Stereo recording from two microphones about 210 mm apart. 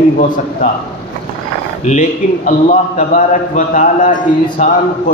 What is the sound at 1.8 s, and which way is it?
A man's voice, 40° left (ahead or behind).